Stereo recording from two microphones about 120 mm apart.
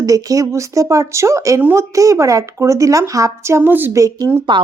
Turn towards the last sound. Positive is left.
turn(degrees=-25)  # may be behind; listen again after turning